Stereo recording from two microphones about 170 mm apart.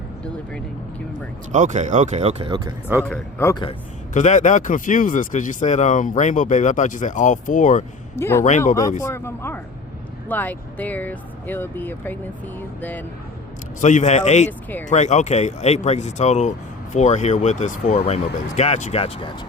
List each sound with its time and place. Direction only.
1.5 s speech: 45° right (ahead or behind)
3.1 s speech: 15° left (ahead or behind)
4.1 s speech: 45° left (ahead or behind)
8.1 s speech: 15° left (ahead or behind)
8.4 s speech: 45° left (ahead or behind)
9.0 s speech: 15° left (ahead or behind)
13.8 s speech: 45° left (ahead or behind)